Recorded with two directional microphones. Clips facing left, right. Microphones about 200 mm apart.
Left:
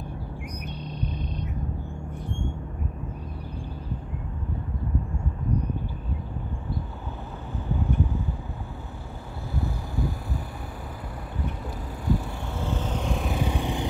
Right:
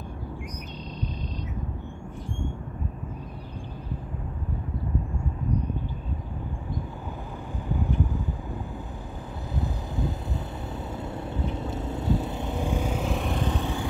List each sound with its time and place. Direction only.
9.6 s vehicle: 20° right (ahead or behind)
11.3 s vehicle: 25° right (ahead or behind); by 13.8 s 15° left (ahead or behind)